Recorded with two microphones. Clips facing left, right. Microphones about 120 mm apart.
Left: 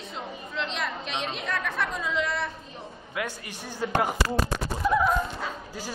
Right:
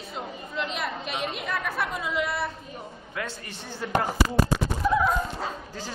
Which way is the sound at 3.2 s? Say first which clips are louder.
Left 2 dB; 15° left (ahead or behind).